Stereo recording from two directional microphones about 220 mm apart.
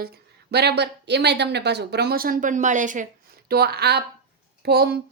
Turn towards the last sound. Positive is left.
turn(degrees=-45)  # may be behind; listen again after turning